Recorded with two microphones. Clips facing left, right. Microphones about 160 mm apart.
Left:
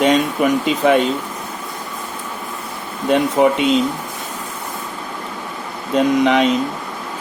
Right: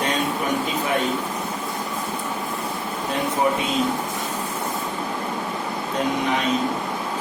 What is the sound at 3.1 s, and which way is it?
Speech, 80° left.